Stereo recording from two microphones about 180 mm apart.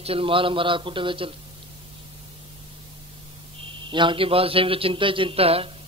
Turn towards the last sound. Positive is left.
turn(degrees=-30)  # may be behind; listen again after turning